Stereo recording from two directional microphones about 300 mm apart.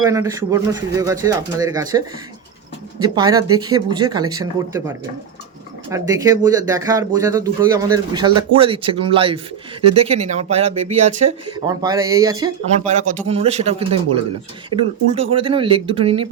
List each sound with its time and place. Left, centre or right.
0.1 s speech: centre
12.6 s a man's voice: right